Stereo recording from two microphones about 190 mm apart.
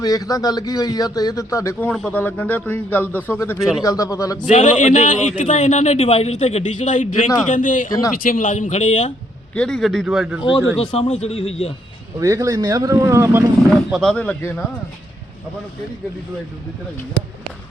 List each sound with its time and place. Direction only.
0.0 s a man's voice: 20° left (ahead or behind)
1.9 s a man's voice: 5° left (ahead or behind)
3.6 s speech: centre (ahead or behind)
3.8 s a man's voice: 15° left (ahead or behind)
4.4 s a man's voice: 40° left (ahead or behind)
9.6 s speech: 5° left (ahead or behind)
10.8 s a man's voice: 30° left (ahead or behind)
12.2 s speech: 15° right (ahead or behind)
13.9 s speech: 5° left (ahead or behind)